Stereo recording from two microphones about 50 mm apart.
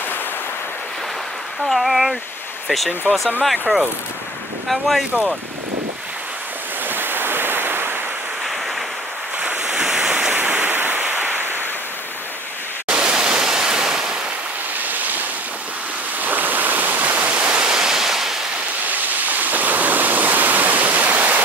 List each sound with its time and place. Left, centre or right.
1.7 s speech: centre
6.9 s waves: right
9.4 s waves: right
10.3 s a sound: right
12.8 s pink noise: centre
16.2 s waterfall: right
17.7 s waterfall: centre
18.9 s rain: right